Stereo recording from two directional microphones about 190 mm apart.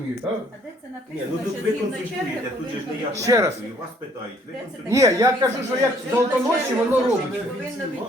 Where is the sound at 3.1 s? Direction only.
15° right (ahead or behind).